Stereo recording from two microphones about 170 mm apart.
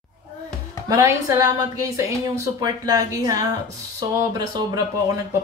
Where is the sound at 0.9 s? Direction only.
20° right (ahead or behind).